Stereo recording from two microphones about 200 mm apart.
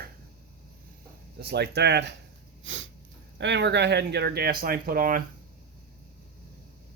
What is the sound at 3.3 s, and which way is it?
Speech, 60° right (ahead or behind).